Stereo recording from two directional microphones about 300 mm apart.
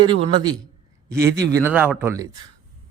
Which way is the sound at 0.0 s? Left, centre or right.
Centre.